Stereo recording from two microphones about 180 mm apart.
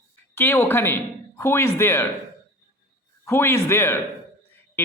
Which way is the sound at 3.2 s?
15° left (ahead or behind).